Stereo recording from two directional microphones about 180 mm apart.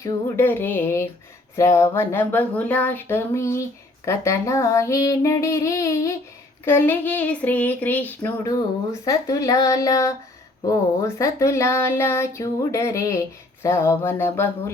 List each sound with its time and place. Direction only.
0.0 s speech: 15° left (ahead or behind)